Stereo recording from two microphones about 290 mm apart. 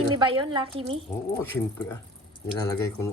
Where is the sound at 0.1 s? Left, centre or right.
Centre.